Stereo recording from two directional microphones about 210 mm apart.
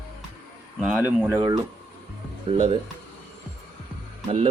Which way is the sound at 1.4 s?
20° right (ahead or behind).